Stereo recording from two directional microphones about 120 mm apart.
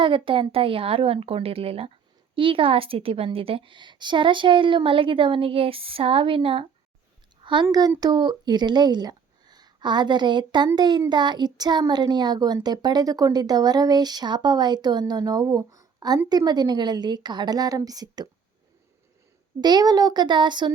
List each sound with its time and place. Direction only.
0.0 s speech: 45° right (ahead or behind)
19.6 s speech: 35° right (ahead or behind)